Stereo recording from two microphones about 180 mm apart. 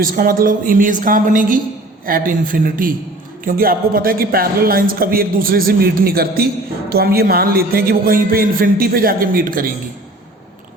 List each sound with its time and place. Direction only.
0.0 s a woman's voice: 50° right (ahead or behind)